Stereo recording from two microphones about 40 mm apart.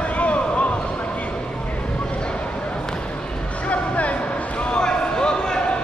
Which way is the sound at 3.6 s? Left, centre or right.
Left.